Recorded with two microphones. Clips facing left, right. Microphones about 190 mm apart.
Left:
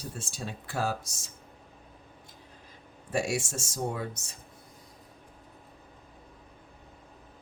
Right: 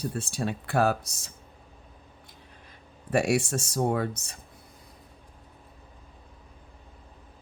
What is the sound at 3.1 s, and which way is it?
Speech, 60° right (ahead or behind).